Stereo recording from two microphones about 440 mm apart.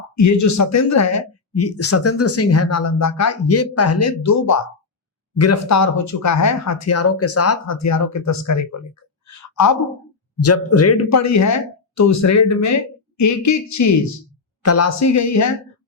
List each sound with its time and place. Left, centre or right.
0.2 s speech: left
9.2 s a sound: left
10.3 s speech: left